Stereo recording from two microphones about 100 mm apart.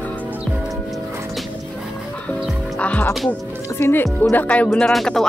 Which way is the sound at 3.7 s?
20° left (ahead or behind).